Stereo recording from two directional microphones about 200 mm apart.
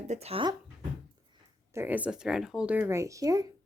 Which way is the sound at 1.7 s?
10° right (ahead or behind).